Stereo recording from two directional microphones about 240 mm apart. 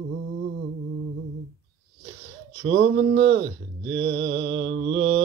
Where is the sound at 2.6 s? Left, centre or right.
Right.